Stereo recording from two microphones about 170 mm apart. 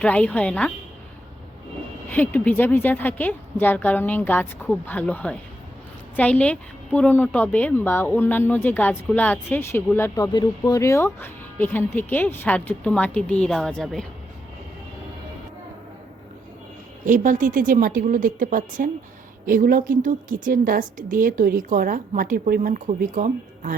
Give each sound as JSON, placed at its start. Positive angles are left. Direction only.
{"t": 0.0, "sound": "a woman's voice", "side_deg": 5}
{"t": 2.0, "sound": "a woman's voice", "side_deg": 10}
{"t": 10.3, "sound": "a woman's voice", "side_deg": 25}
{"t": 17.1, "sound": "a woman's voice", "side_deg": -50}